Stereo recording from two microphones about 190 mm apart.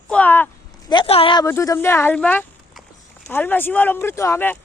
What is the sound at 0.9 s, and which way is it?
Speech, 30° left (ahead or behind).